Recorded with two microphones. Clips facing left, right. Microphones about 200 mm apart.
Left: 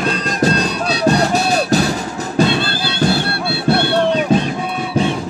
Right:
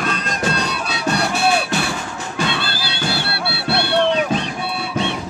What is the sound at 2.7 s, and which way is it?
Music, 50° left (ahead or behind).